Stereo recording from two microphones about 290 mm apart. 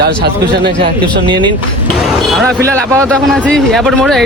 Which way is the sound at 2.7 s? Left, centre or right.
Centre.